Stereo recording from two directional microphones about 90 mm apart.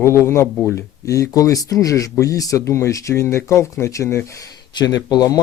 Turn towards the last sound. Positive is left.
turn(degrees=45)  # may be behind; listen again after turning